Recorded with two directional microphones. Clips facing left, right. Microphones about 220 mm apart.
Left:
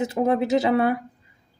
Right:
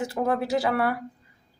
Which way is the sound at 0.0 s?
20° left (ahead or behind).